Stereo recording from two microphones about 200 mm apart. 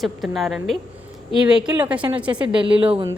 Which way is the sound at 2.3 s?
25° right (ahead or behind).